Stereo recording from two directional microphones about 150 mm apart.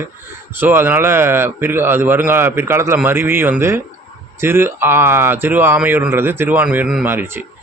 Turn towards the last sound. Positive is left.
turn(degrees=-15)  # may be behind; listen again after turning